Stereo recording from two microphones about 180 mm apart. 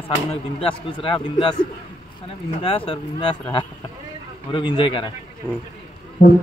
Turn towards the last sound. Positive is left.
turn(degrees=45)  # may be behind; listen again after turning